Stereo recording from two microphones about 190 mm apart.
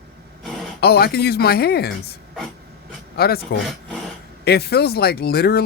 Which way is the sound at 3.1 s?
55° left (ahead or behind).